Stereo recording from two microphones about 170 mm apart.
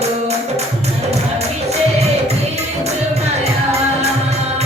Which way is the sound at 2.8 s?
40° right (ahead or behind).